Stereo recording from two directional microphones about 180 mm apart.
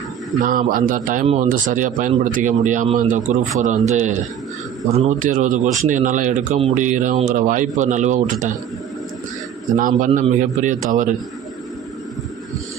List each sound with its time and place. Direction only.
0.3 s a man's voice: 50° right (ahead or behind)
9.7 s a man's voice: 45° right (ahead or behind)